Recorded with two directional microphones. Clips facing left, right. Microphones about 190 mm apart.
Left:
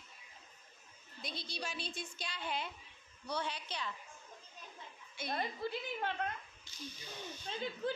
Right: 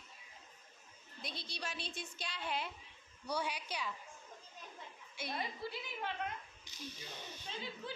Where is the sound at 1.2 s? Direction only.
Centre (ahead or behind).